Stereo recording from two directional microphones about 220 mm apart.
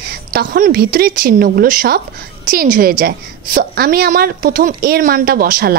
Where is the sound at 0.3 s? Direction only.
40° right (ahead or behind).